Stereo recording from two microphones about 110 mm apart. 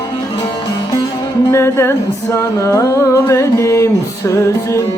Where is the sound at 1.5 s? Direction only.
25° left (ahead or behind).